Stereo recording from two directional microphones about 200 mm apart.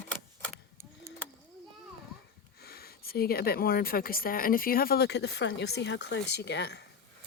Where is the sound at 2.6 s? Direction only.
50° left (ahead or behind).